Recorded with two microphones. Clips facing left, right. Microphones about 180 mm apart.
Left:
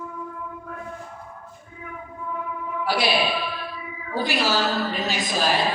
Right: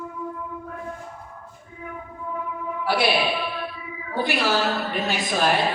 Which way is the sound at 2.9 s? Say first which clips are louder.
Right 2 dB; 60° right (ahead or behind).